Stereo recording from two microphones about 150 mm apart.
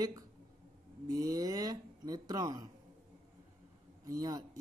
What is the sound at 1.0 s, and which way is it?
Speech, 25° right (ahead or behind).